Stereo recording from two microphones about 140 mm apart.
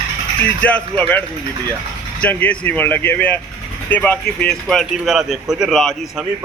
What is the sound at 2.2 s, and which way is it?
A man's voice, 10° left (ahead or behind).